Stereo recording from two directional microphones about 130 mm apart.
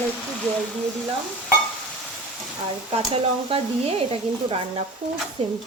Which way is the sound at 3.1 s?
50° right (ahead or behind).